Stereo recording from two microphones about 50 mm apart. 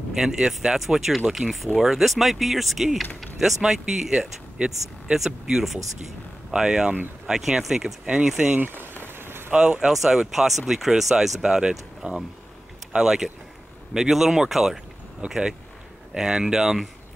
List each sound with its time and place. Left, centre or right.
0.1 s speech: centre
8.5 s speech: right
9.0 s rain on surface: right
9.5 s speech: right